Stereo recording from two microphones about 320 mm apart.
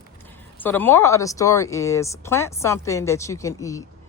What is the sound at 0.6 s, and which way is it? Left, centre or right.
Speech, centre.